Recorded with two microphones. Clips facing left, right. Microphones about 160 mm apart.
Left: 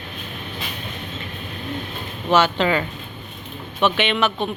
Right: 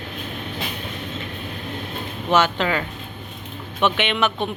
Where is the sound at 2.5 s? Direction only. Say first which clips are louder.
Left 3 dB; 5° left (ahead or behind).